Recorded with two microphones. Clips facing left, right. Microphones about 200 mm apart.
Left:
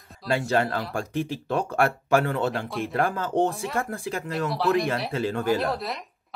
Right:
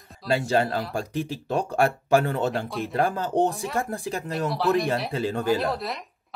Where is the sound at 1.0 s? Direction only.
40° right (ahead or behind).